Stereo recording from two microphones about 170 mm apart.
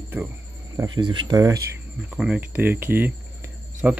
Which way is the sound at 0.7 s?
25° right (ahead or behind).